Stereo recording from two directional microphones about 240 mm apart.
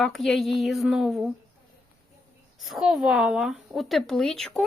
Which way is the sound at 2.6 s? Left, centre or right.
Centre.